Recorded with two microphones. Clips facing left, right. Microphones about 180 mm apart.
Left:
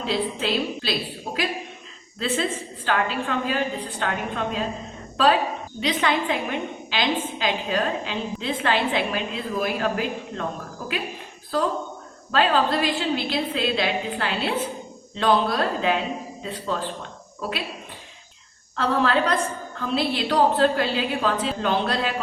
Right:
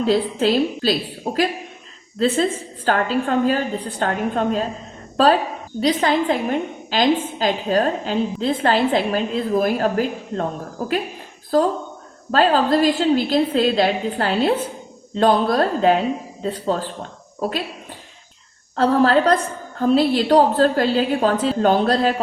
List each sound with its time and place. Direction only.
0.0 s a woman's voice: 40° right (ahead or behind)
18.8 s a woman's voice: 40° right (ahead or behind)